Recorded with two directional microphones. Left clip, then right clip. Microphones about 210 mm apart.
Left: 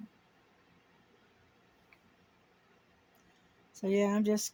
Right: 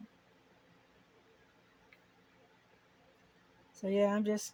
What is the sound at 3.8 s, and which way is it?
Speech, 55° left (ahead or behind).